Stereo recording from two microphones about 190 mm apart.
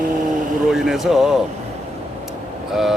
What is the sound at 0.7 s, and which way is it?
Speech, centre (ahead or behind).